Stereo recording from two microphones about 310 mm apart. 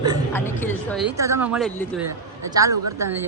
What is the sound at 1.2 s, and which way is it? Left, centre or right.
Speech, centre.